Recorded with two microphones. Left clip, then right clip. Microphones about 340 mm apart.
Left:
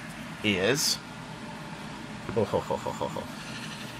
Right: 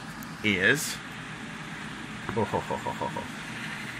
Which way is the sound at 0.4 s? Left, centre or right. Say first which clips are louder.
Right 1 dB; left.